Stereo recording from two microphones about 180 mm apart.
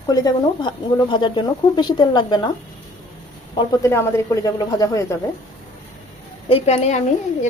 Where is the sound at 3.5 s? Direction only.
20° left (ahead or behind).